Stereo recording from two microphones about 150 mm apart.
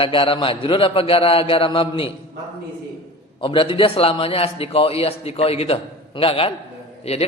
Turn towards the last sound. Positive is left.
turn(degrees=45)  # may be behind; listen again after turning